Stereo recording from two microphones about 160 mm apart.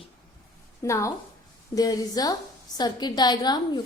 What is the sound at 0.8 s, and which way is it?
A woman's voice, 20° left (ahead or behind).